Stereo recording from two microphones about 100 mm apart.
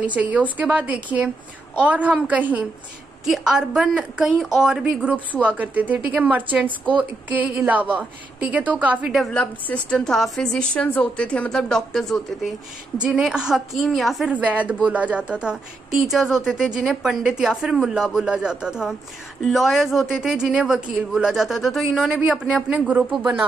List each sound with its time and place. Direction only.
0.0 s speech: 15° right (ahead or behind)
9.3 s a woman's voice: 15° left (ahead or behind)
13.0 s speech: 10° right (ahead or behind)
14.3 s speech: 15° right (ahead or behind)